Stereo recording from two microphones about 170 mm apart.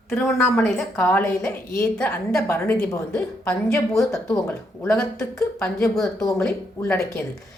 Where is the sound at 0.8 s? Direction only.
10° left (ahead or behind).